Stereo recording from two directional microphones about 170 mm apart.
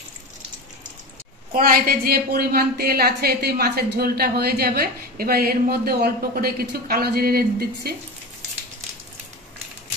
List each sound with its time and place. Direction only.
1.5 s a woman's voice: 55° right (ahead or behind)